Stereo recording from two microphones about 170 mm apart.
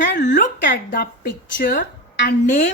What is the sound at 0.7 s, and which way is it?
A woman's voice, 65° left (ahead or behind).